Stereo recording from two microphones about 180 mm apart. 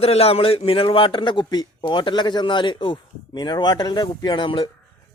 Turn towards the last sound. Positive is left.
turn(degrees=25)  # may be behind; listen again after turning